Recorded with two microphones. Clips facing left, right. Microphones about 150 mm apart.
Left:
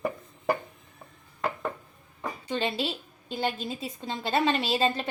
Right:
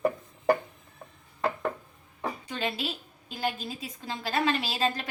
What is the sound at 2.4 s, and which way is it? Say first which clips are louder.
A woman's voice: left 6 dB; 30° left (ahead or behind).